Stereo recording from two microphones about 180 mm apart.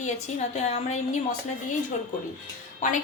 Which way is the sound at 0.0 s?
40° left (ahead or behind).